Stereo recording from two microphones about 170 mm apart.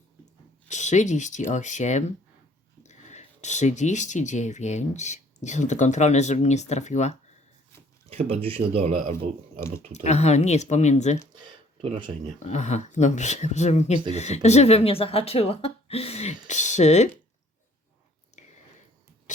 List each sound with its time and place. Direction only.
0.7 s speech: 45° left (ahead or behind)
8.1 s speech: 35° right (ahead or behind)
9.9 s speech: 40° left (ahead or behind)
11.3 s speech: 30° right (ahead or behind)
12.4 s speech: 45° left (ahead or behind)
18.3 s a sound: 45° left (ahead or behind)